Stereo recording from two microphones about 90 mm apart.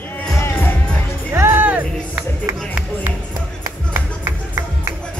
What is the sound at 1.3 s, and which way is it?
Music, 25° right (ahead or behind).